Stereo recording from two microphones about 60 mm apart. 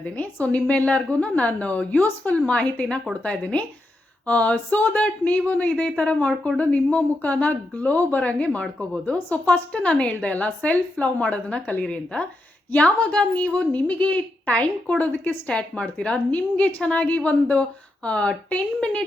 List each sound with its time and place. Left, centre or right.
0.0 s a woman's voice: left